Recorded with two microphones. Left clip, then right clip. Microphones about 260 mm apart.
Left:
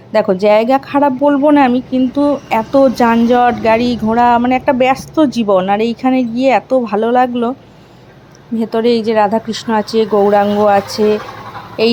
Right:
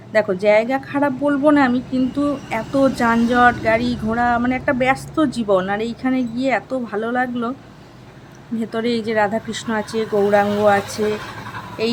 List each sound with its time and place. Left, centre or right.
0.1 s speech: centre
8.5 s speech: centre
11.8 s speech: centre